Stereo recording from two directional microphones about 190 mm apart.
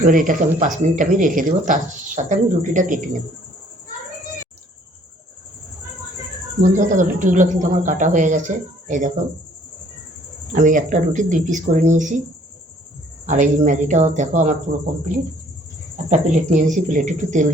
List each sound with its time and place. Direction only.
0.1 s speech: 45° right (ahead or behind)
6.7 s speech: 40° right (ahead or behind)
10.5 s speech: 45° right (ahead or behind)
13.2 s speech: 40° right (ahead or behind)
16.0 s speech: 40° right (ahead or behind)